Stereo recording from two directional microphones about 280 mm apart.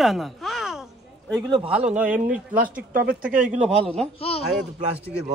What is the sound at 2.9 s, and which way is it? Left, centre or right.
Speech, right.